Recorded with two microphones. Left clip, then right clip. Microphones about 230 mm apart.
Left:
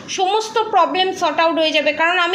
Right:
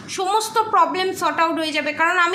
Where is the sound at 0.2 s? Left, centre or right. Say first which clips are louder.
Left 2 dB; right.